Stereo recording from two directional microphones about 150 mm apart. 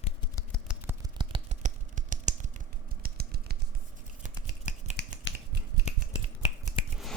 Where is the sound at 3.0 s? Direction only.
90° right.